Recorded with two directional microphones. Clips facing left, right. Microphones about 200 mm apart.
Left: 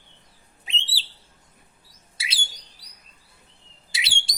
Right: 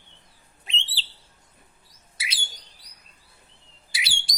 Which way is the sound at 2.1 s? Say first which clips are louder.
Even; 25° left (ahead or behind).